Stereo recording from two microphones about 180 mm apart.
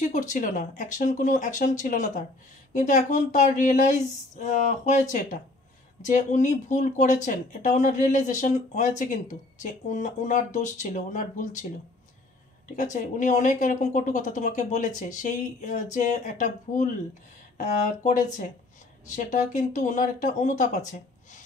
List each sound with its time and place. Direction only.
0.0 s speech: 45° left (ahead or behind)
6.0 s speech: 45° left (ahead or behind)
12.9 s speech: 45° left (ahead or behind)